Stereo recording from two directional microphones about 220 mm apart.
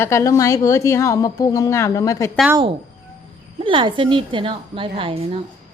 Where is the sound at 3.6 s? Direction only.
20° right (ahead or behind).